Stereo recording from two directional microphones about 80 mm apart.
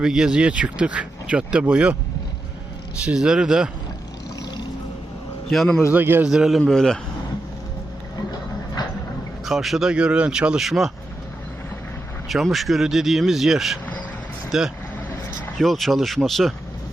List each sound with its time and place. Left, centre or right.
0.0 s speech: centre
3.0 s speech: centre
5.5 s speech: centre
5.9 s a man's voice: right
6.2 s speech: centre
6.7 s a man's voice: centre
9.5 s speech: centre
12.3 s speech: centre